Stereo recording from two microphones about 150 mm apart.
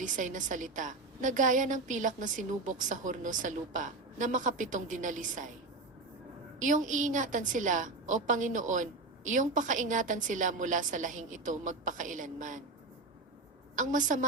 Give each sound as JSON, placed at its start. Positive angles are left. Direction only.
{"t": 0.0, "sound": "a woman's voice", "side_deg": -60}
{"t": 6.6, "sound": "a woman's voice", "side_deg": -55}
{"t": 13.7, "sound": "a woman's voice", "side_deg": -55}